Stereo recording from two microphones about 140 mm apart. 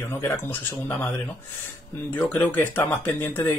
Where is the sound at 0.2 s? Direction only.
15° left (ahead or behind).